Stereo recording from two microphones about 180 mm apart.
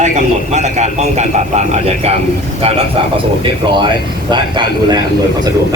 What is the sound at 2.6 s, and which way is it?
Speech, 35° right (ahead or behind).